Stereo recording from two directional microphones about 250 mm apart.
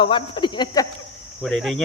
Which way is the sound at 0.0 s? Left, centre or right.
Centre.